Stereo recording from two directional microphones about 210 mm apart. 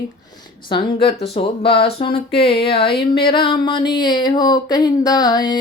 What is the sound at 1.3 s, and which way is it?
Speech, 25° left (ahead or behind).